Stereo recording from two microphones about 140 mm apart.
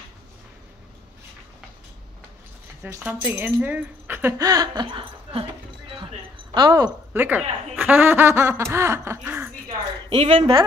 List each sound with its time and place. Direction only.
2.9 s speech: 10° right (ahead or behind); by 5.0 s 30° right (ahead or behind)
6.5 s speech: 30° right (ahead or behind)
7.2 s speech: 10° right (ahead or behind)
10.0 s speech: 40° right (ahead or behind)